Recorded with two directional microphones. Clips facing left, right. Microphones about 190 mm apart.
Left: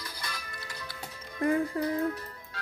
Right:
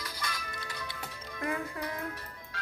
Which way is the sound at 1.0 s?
35° left (ahead or behind).